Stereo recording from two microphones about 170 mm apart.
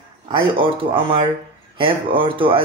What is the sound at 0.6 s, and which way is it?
Speech, 30° right (ahead or behind).